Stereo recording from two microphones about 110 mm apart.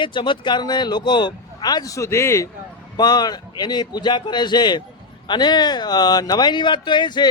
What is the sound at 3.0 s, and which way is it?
Speech, 40° left (ahead or behind).